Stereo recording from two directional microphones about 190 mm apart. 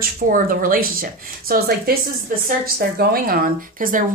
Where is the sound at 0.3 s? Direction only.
45° right (ahead or behind).